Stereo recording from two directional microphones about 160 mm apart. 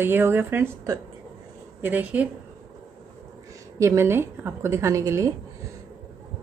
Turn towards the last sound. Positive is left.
turn(degrees=-20)  # may be behind; listen again after turning